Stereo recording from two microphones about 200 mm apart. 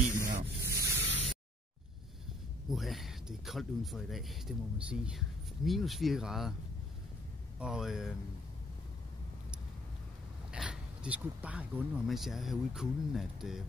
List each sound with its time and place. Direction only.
0.2 s sanding: 45° right (ahead or behind)
0.7 s a sound: 15° right (ahead or behind)
2.7 s speech: centre (ahead or behind)
7.5 s speech: 5° right (ahead or behind)
10.5 s speech: 5° right (ahead or behind)